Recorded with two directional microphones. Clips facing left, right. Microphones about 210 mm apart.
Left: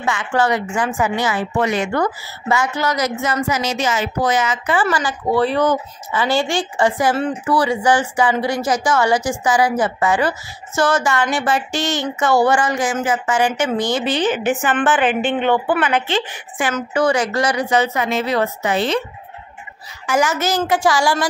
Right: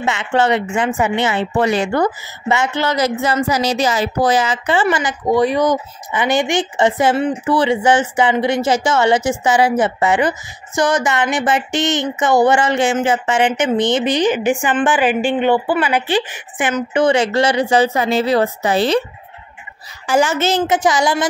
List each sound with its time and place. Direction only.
0.0 s speech: 25° right (ahead or behind)
4.8 s speech: 15° right (ahead or behind); by 19.0 s 35° right (ahead or behind)
20.1 s speech: 30° right (ahead or behind)